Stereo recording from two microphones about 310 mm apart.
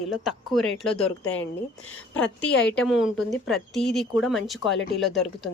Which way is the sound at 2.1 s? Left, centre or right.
Left.